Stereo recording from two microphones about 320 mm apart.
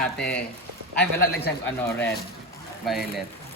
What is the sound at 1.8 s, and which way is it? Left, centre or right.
Speech, centre.